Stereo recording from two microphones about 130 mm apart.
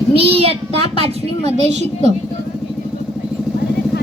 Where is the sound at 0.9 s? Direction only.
50° right (ahead or behind).